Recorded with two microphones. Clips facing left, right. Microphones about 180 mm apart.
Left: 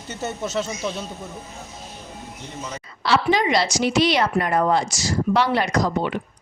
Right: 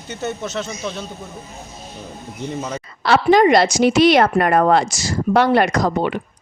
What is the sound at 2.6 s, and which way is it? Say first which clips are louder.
Speech: right 4 dB; 50° right (ahead or behind).